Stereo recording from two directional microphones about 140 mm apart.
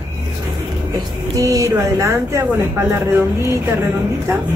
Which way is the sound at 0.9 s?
25° right (ahead or behind).